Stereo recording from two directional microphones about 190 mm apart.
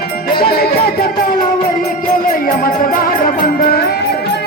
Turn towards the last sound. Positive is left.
turn(degrees=50)  # may be behind; listen again after turning